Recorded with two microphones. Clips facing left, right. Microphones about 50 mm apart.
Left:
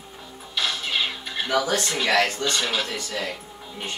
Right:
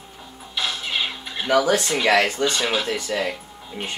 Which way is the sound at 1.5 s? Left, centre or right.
Centre.